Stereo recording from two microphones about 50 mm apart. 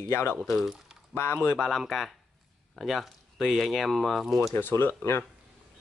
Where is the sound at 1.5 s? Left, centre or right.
Centre.